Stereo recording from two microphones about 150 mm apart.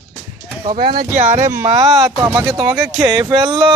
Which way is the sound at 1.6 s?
30° right (ahead or behind).